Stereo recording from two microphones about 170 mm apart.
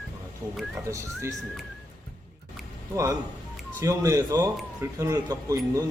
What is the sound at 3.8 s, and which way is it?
A man's voice, 20° right (ahead or behind).